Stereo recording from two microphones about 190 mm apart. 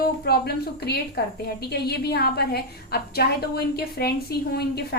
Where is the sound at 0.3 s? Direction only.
55° left (ahead or behind).